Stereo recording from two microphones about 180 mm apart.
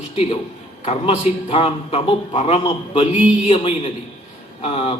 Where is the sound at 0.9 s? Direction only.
30° left (ahead or behind).